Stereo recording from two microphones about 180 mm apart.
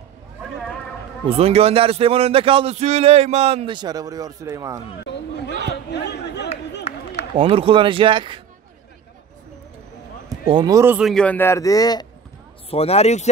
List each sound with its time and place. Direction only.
1.2 s a man's voice: 35° right (ahead or behind)
5.9 s a sound: 70° left (ahead or behind)
7.3 s speech: 30° right (ahead or behind)
10.5 s speech: 20° right (ahead or behind)
11.0 s a man's voice: centre (ahead or behind); by 12.1 s 20° left (ahead or behind)
12.6 s speech: 35° left (ahead or behind)